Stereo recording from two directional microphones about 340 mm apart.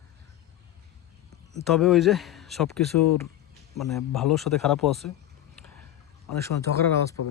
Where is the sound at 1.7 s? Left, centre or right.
Centre.